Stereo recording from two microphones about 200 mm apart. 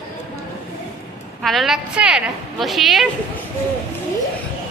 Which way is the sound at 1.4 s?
Centre (ahead or behind).